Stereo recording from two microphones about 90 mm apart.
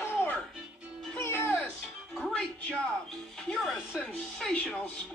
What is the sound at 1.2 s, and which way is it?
Music, 25° left (ahead or behind).